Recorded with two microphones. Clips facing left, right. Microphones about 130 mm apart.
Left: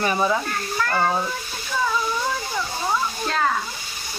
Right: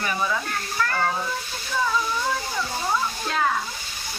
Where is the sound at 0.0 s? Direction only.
30° left (ahead or behind).